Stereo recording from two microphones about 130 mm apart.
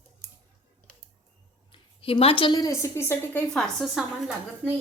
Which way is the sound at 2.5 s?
25° left (ahead or behind).